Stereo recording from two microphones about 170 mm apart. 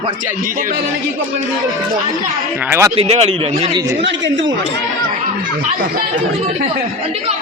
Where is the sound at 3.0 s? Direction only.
35° right (ahead or behind).